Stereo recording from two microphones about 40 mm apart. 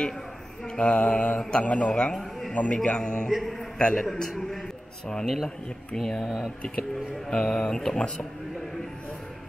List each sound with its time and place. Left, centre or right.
0.7 s mantra: left
3.0 s speech: left
3.3 s a man's voice: centre
3.7 s speech: left
4.3 s a man's voice: centre
6.2 s a man's voice: centre
7.2 s speech: centre